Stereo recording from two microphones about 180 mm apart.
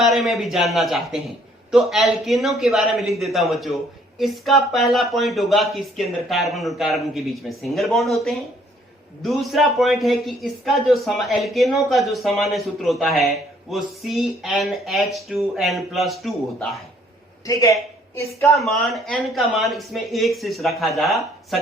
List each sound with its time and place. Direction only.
0.0 s speech: centre (ahead or behind)
17.4 s a sound: 20° left (ahead or behind)
18.5 s speech: centre (ahead or behind)